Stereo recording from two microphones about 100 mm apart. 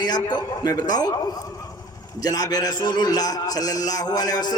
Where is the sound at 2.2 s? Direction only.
40° left (ahead or behind).